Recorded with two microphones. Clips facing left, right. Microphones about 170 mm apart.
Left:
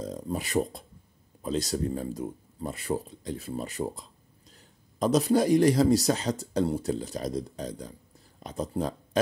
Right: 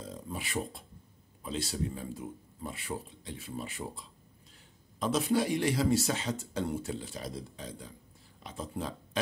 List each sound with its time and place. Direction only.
0.0 s speech: 40° left (ahead or behind)